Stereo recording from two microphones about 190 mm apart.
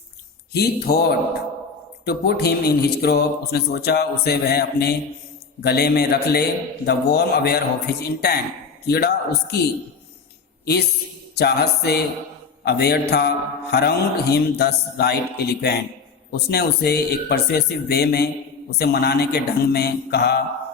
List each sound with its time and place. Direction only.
0.5 s a man's voice: 55° left (ahead or behind)
11.3 s a man's voice: 55° left (ahead or behind)